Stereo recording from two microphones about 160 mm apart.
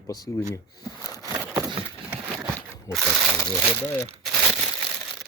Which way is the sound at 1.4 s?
20° right (ahead or behind).